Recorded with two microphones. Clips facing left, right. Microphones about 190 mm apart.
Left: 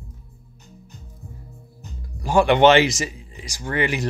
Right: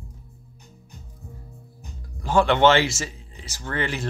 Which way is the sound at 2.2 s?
10° left (ahead or behind).